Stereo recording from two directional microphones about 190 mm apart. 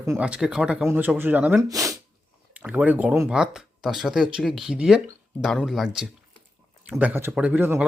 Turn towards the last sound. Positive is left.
turn(degrees=-10)  # may be behind; listen again after turning